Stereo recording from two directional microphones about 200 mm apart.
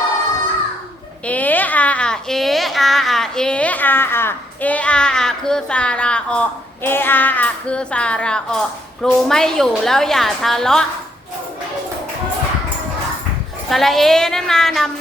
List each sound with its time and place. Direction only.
1.2 s a child's voice: 5° left (ahead or behind)
13.7 s speech: centre (ahead or behind)